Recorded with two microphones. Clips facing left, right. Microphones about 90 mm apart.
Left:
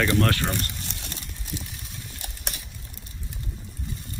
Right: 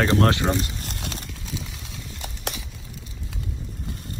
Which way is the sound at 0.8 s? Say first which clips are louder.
Right 4 dB; 50° right (ahead or behind).